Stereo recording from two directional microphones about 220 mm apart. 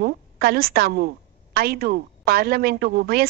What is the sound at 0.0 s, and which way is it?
A woman's voice, 45° right (ahead or behind).